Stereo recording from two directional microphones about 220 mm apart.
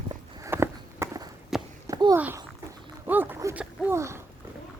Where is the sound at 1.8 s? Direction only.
15° right (ahead or behind).